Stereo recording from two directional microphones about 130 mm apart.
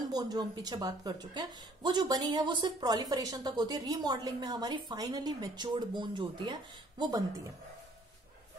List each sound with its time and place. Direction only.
0.1 s speech: 30° right (ahead or behind)